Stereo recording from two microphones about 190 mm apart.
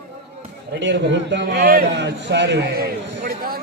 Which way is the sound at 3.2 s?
50° right (ahead or behind).